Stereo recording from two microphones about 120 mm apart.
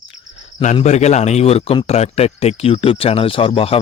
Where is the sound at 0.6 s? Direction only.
75° left (ahead or behind).